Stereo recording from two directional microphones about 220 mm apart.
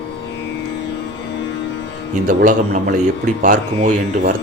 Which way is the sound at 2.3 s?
35° right (ahead or behind).